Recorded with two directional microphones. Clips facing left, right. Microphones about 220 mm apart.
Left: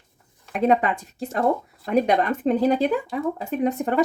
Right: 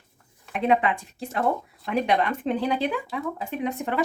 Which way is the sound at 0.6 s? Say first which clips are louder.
Left 3 dB; 40° left (ahead or behind).